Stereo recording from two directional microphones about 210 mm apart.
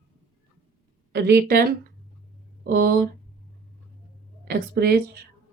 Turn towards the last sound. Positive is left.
turn(degrees=-50)  # may be behind; listen again after turning